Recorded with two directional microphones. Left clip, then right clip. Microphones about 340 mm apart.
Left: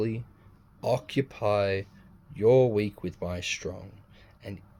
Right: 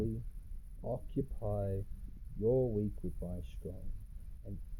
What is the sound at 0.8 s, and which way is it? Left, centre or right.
Speech, left.